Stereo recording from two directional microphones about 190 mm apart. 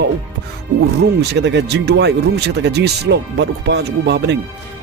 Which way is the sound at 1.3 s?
65° right (ahead or behind).